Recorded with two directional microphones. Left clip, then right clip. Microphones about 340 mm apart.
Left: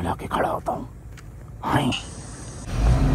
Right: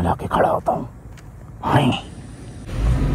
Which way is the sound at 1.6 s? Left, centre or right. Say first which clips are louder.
Right 5 dB; centre.